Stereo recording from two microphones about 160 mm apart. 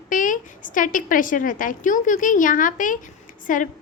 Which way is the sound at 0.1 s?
55° left (ahead or behind).